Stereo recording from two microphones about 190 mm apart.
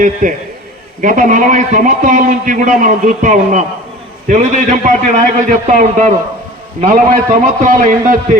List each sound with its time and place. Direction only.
0.0 s a man's voice: 45° right (ahead or behind)